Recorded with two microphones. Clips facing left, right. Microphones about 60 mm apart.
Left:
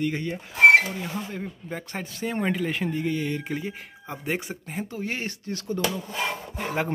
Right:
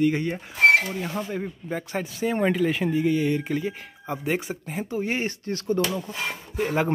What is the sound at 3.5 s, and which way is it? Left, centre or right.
Speech, centre.